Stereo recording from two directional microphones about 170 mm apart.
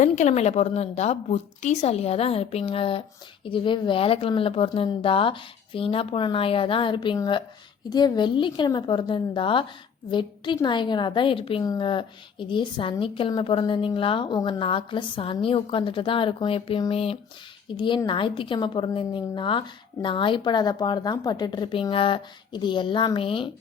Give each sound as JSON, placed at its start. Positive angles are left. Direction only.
{"t": 0.0, "sound": "a woman's voice", "side_deg": 40}